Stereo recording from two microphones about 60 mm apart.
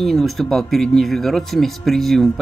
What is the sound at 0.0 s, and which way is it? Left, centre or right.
Speech, centre.